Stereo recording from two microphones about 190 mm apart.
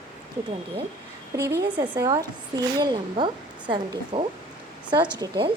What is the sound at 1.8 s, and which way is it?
Speech, 20° right (ahead or behind).